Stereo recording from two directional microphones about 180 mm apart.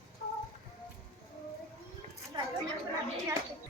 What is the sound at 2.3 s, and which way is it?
Chatter, 25° right (ahead or behind).